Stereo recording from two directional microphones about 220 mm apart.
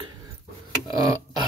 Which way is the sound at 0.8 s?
15° right (ahead or behind).